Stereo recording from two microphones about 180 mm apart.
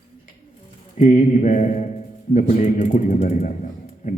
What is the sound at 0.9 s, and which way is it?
A man's voice, 45° left (ahead or behind).